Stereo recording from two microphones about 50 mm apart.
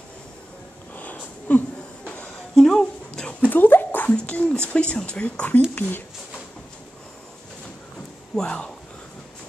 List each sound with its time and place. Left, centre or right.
0.9 s a sound: left; by 3.3 s centre
3.3 s dog: left
4.1 s speech: left
5.8 s speech: left
8.4 s speech: centre